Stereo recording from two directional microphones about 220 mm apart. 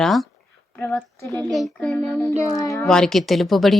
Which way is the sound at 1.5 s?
Centre (ahead or behind).